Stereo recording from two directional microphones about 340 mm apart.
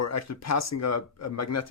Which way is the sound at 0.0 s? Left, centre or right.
Left.